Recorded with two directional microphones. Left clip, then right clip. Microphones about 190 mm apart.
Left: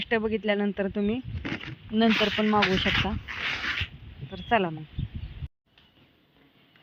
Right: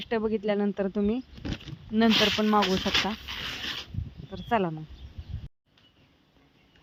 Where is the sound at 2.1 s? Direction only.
25° right (ahead or behind).